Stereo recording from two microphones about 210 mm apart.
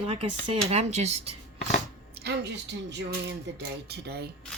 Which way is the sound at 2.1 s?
50° right (ahead or behind).